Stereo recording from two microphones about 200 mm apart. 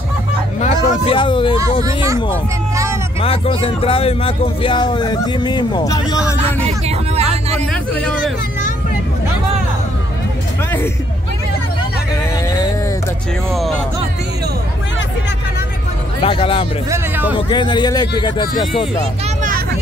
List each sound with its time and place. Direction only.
0.6 s a sound: 25° left (ahead or behind)
1.6 s speech: 15° right (ahead or behind)
2.7 s a sound: 15° right (ahead or behind)
3.2 s speech: 30° left (ahead or behind)
6.9 s vehicle: 30° right (ahead or behind)
7.7 s a sound: 5° left (ahead or behind)
16.2 s speech: 25° left (ahead or behind)
16.9 s speech: 10° right (ahead or behind)
17.4 s speech: 25° left (ahead or behind)